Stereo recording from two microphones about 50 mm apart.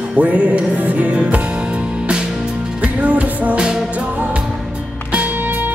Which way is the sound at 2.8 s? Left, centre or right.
Right.